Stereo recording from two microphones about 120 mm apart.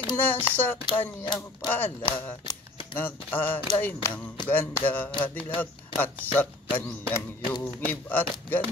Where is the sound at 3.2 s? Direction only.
15° left (ahead or behind).